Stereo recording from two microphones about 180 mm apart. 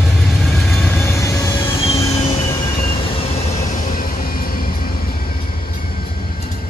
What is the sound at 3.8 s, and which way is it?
Music, 55° left (ahead or behind).